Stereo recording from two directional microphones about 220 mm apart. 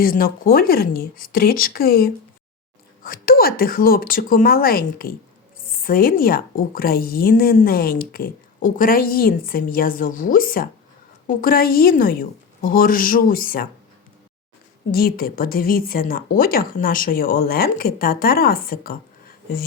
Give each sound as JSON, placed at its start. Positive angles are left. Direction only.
{"t": 0.0, "sound": "a woman's voice", "side_deg": 40}
{"t": 14.9, "sound": "a woman's voice", "side_deg": 40}